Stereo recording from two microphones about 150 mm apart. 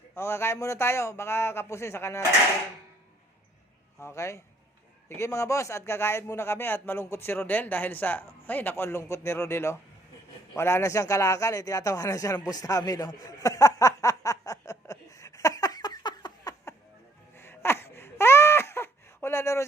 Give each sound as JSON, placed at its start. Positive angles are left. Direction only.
{"t": 0.2, "sound": "a man's voice", "side_deg": 15}
{"t": 4.0, "sound": "a man's voice", "side_deg": 20}
{"t": 10.5, "sound": "a sound", "side_deg": 15}
{"t": 17.3, "sound": "wail", "side_deg": 15}